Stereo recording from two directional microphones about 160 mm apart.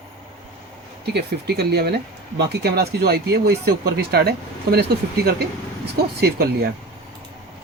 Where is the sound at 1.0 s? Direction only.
90° right.